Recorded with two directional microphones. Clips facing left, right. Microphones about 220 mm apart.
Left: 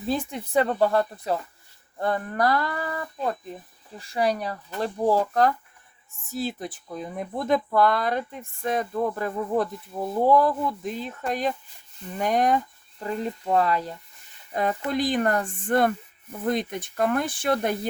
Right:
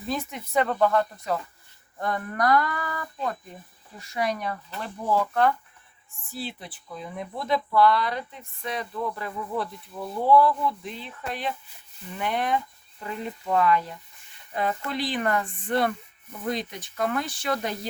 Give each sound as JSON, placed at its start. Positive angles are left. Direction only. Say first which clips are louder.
{"t": 0.0, "sound": "speech", "louder": "left 4 dB", "side_deg": 30}